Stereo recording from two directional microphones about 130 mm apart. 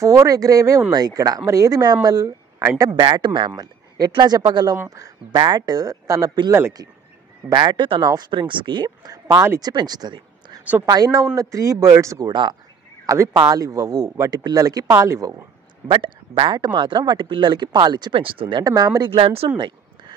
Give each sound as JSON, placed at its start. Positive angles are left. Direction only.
{"t": 0.0, "sound": "speech", "side_deg": -25}
{"t": 9.6, "sound": "speech", "side_deg": -30}
{"t": 13.0, "sound": "speech", "side_deg": -25}
{"t": 15.9, "sound": "speech", "side_deg": -40}
{"t": 18.6, "sound": "speech", "side_deg": -30}
{"t": 19.1, "sound": "speech", "side_deg": -45}